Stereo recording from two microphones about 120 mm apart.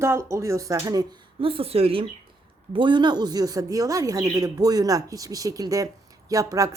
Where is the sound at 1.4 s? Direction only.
50° right (ahead or behind).